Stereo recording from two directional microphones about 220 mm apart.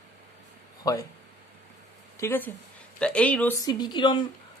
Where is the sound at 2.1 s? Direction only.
10° left (ahead or behind).